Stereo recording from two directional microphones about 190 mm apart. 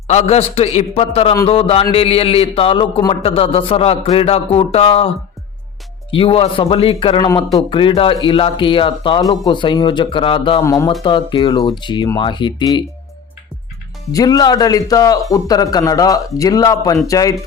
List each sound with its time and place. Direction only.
0.1 s a man's voice: 35° left (ahead or behind)
6.1 s a man's voice: 30° left (ahead or behind)
10.6 s a man's voice: 15° left (ahead or behind)
14.1 s a man's voice: 20° left (ahead or behind)